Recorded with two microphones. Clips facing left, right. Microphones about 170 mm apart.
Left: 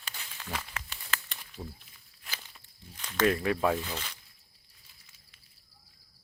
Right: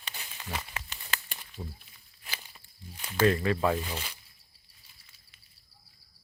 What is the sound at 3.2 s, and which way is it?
Speech, 10° left (ahead or behind).